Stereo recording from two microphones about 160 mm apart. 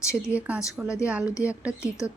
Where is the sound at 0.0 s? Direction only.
20° left (ahead or behind).